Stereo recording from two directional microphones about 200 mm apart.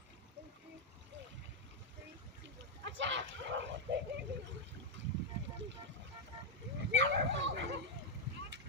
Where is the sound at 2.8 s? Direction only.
65° right (ahead or behind).